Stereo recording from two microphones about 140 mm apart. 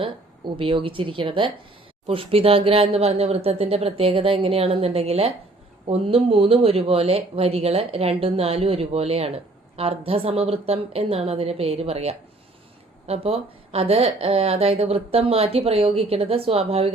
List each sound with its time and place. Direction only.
0.0 s speech: 40° right (ahead or behind)